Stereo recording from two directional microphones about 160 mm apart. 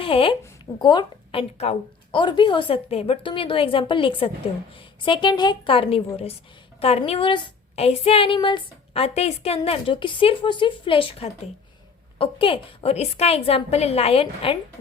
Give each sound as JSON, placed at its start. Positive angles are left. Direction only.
{"t": 0.0, "sound": "a woman's voice", "side_deg": 35}